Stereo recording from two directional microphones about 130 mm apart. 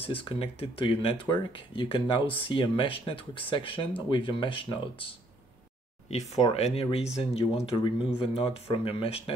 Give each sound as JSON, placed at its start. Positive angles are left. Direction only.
{"t": 0.0, "sound": "speech", "side_deg": 45}
{"t": 6.0, "sound": "speech", "side_deg": 55}